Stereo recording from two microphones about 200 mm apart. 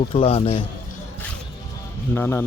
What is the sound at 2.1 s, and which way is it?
Speech, 10° left (ahead or behind).